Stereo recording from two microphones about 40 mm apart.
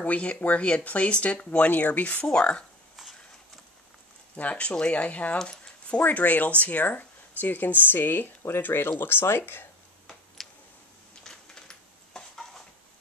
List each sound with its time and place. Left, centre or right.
0.0 s speech: left
1.7 s speech: left
4.4 s speech: left
5.5 s keys jangling: left
6.0 s speech: left
9.4 s speech: left
10.0 s a sound: centre
11.2 s a sound: centre